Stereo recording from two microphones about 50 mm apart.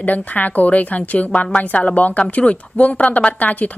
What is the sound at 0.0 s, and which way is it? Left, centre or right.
A woman's voice, left.